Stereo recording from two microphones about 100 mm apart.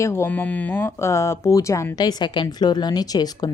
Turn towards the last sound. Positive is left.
turn(degrees=40)  # may be behind; listen again after turning